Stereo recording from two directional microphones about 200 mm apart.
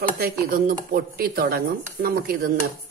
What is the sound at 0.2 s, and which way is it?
Dishes, 45° right (ahead or behind).